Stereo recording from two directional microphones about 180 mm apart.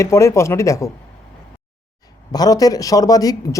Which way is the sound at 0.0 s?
15° left (ahead or behind).